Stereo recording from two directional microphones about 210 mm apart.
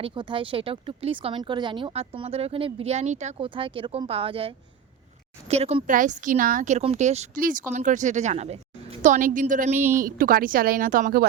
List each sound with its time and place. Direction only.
0.0 s a woman's voice: 20° right (ahead or behind); by 11.3 s 45° right (ahead or behind)